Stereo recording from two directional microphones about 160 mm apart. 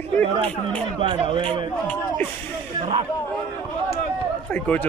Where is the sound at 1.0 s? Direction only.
30° right (ahead or behind).